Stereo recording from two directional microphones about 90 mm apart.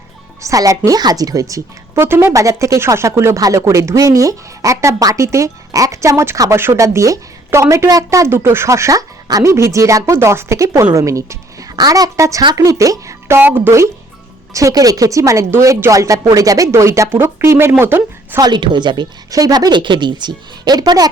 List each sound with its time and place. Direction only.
0.4 s a woman's voice: 40° right (ahead or behind); by 18.3 s 25° right (ahead or behind)
18.3 s a woman's voice: 55° right (ahead or behind)
19.3 s a woman's voice: 45° right (ahead or behind)